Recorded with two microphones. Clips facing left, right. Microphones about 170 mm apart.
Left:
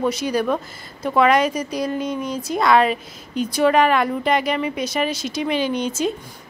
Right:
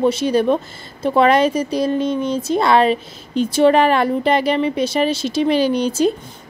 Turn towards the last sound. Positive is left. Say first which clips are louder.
# right 5 dB
turn(degrees=-35)  # may be behind; listen again after turning